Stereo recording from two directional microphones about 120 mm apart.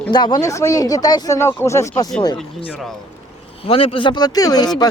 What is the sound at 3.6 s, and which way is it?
Speech, 50° left (ahead or behind).